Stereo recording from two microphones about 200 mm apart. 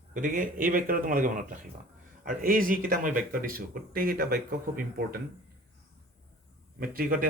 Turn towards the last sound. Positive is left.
turn(degrees=-45)  # may be behind; listen again after turning